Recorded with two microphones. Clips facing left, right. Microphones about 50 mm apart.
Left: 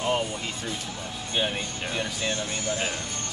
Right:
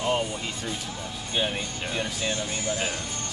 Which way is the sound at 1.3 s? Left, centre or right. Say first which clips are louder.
Even; centre.